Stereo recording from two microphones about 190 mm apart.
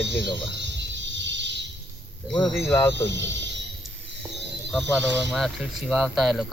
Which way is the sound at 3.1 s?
70° right (ahead or behind).